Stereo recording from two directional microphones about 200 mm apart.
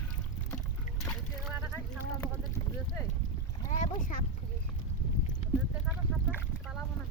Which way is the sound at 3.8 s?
35° left (ahead or behind).